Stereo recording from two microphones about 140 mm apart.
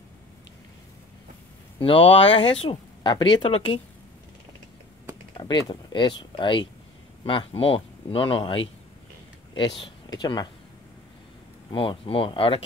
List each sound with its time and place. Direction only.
1.8 s speech: 40° left (ahead or behind)
5.4 s speech: 35° left (ahead or behind)
11.7 s speech: 40° left (ahead or behind)